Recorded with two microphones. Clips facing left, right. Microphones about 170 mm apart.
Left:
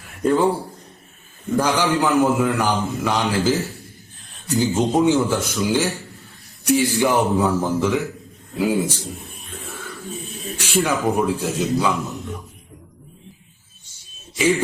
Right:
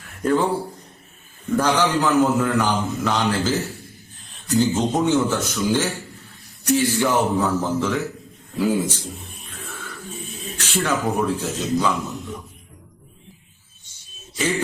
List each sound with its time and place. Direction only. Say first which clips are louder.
0.3 s a man's voice: left 2 dB; 10° left (ahead or behind)
9.6 s a sound: left 2 dB; 10° left (ahead or behind)
10.6 s a man's voice: left 2 dB; 10° left (ahead or behind)